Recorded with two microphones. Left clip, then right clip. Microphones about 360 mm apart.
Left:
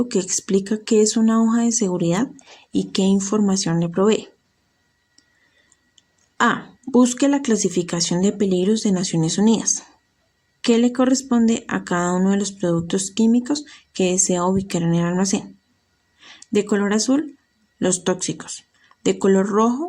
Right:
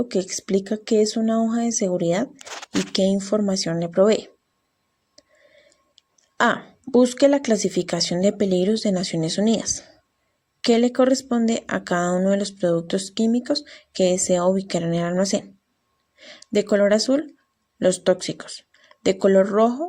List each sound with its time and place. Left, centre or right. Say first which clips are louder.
0.0 s speech: left 2 dB; centre
6.3 s speech: left 1 dB; centre